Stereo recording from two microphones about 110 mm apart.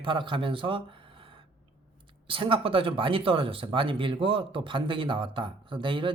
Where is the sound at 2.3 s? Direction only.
50° right (ahead or behind).